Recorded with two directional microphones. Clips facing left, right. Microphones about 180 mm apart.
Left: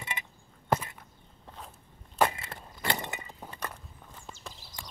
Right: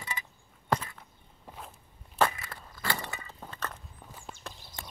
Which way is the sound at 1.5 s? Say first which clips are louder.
Right 1 dB; 10° right (ahead or behind).